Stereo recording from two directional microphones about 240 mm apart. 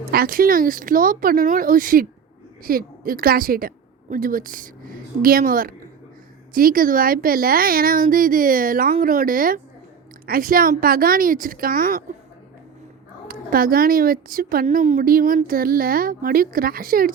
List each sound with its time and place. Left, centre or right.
0.0 s speech: right
13.2 s speech: right